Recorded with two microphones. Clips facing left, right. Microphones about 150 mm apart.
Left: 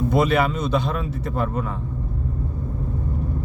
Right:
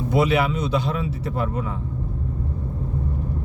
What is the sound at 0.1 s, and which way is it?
Speech, 50° left (ahead or behind).